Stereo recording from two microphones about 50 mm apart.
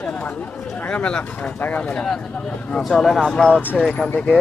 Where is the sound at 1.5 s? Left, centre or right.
Left.